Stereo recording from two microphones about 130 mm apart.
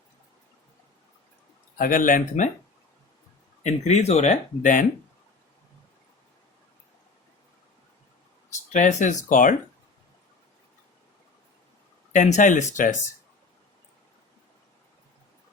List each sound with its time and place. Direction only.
1.8 s speech: 90° left
3.6 s speech: 60° left (ahead or behind); by 4.9 s 80° left
8.7 s speech: 65° left (ahead or behind); by 9.6 s 90° left
12.1 s speech: 75° left (ahead or behind)